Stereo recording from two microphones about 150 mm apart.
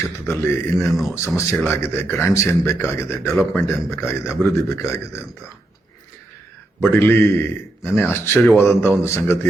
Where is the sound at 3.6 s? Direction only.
15° left (ahead or behind).